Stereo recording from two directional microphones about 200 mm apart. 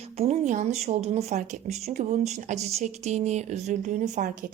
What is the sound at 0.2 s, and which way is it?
Speech, 35° right (ahead or behind).